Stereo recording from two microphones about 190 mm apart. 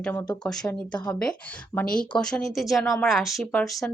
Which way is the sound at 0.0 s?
10° left (ahead or behind).